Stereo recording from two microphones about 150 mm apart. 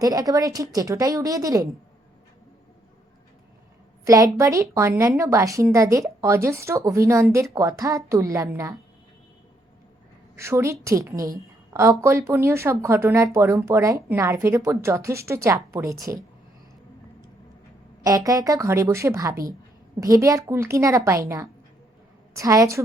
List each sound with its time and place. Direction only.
0.0 s a woman's voice: 25° right (ahead or behind)
4.0 s a woman's voice: 20° right (ahead or behind)
10.3 s a woman's voice: 20° right (ahead or behind)
18.0 s a woman's voice: 25° right (ahead or behind)